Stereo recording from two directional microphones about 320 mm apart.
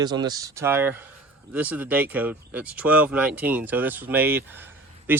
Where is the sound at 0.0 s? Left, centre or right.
Centre.